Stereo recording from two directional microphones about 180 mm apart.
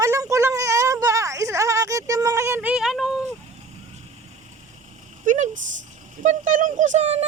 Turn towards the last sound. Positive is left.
turn(degrees=-40)  # may be behind; listen again after turning